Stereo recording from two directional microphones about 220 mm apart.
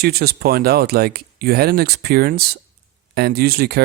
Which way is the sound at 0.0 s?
45° right (ahead or behind).